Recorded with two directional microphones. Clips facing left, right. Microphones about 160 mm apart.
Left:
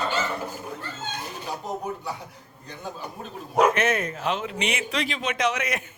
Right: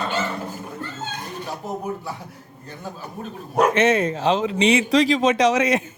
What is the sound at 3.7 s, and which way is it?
Speech, 30° right (ahead or behind).